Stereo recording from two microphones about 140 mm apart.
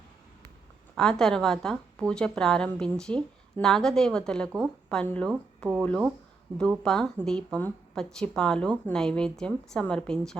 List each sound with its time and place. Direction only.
0.9 s a woman's voice: 5° left (ahead or behind)